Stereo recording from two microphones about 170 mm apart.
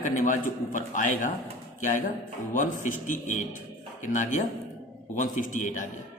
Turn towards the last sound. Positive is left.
turn(degrees=50)  # may be behind; listen again after turning